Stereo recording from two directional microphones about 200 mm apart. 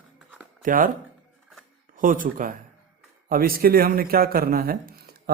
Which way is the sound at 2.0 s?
45° right (ahead or behind).